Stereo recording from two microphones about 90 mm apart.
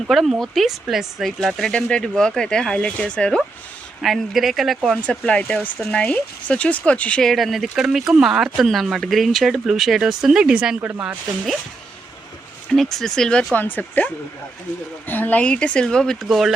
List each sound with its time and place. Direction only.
0.1 s speech: centre (ahead or behind)
5.0 s speech: 15° left (ahead or behind); by 10.9 s 15° right (ahead or behind)
12.7 s speech: 5° left (ahead or behind)
13.5 s speech: 20° left (ahead or behind)